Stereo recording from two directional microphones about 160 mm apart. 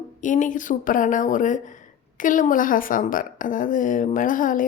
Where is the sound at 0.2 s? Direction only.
50° left (ahead or behind).